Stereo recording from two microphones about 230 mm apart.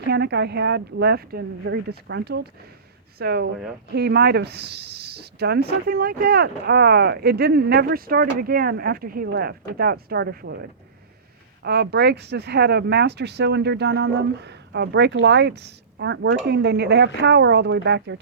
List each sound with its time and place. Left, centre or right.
0.1 s speech: right